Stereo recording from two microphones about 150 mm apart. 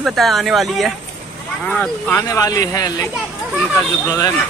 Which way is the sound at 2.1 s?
25° left (ahead or behind).